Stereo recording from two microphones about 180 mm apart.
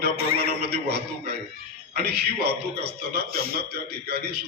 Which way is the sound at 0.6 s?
65° right (ahead or behind).